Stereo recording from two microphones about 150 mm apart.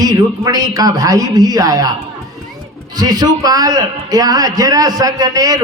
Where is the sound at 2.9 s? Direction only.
25° right (ahead or behind).